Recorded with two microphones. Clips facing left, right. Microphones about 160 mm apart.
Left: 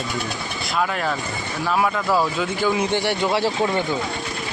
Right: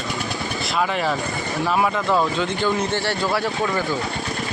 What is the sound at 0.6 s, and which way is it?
A man's voice, centre (ahead or behind).